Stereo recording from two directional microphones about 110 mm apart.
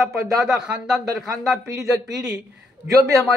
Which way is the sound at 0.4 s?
5° right (ahead or behind).